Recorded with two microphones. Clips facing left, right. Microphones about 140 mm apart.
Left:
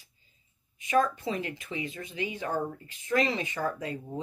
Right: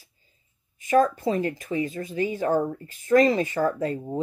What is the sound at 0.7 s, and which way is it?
Speech, 45° right (ahead or behind).